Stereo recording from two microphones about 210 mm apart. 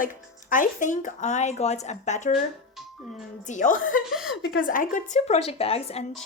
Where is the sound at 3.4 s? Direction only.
35° left (ahead or behind).